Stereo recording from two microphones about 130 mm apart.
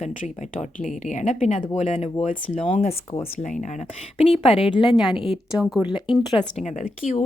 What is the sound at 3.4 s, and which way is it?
Speech, 75° left (ahead or behind).